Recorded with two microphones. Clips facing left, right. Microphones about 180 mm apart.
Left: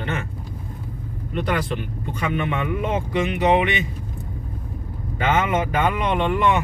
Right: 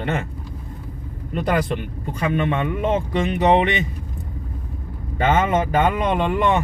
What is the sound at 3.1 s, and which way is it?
Speech, 35° right (ahead or behind).